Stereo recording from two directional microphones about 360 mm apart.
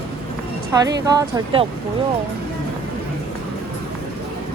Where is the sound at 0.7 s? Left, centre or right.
Centre.